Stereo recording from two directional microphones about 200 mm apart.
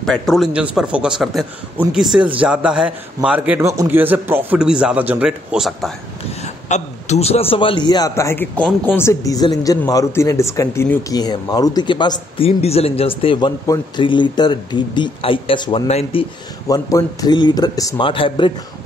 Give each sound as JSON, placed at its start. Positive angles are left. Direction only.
{"t": 0.0, "sound": "a man's voice", "side_deg": 0}
{"t": 6.4, "sound": "a man's voice", "side_deg": 35}